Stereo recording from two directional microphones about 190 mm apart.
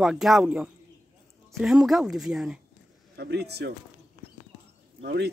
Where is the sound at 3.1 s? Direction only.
60° right (ahead or behind).